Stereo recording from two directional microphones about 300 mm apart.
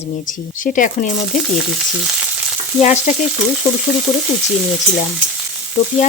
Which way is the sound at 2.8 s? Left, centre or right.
Left.